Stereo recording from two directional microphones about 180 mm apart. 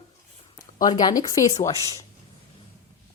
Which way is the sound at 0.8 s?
20° left (ahead or behind).